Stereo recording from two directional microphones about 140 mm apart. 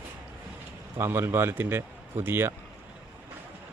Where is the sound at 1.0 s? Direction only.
15° right (ahead or behind).